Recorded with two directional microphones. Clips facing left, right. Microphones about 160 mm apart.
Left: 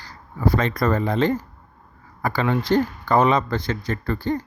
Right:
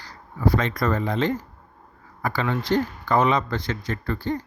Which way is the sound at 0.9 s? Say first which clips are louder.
Left 3 dB; 40° left (ahead or behind).